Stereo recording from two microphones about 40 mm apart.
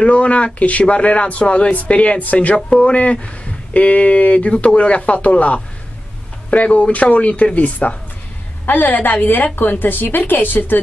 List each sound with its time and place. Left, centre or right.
0.0 s speech: left
8.6 s a woman's voice: left